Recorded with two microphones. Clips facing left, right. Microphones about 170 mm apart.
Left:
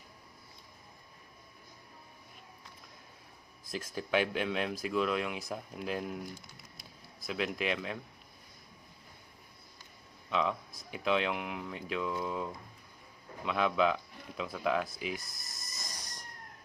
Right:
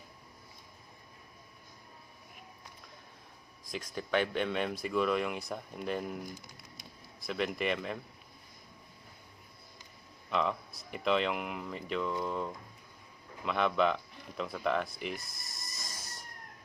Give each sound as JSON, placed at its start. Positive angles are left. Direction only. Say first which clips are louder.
{"t": 3.7, "sound": "speech", "louder": "even", "side_deg": 5}
{"t": 6.7, "sound": "a sound", "louder": "right 1 dB", "side_deg": 0}
{"t": 10.2, "sound": "speech", "louder": "even", "side_deg": 0}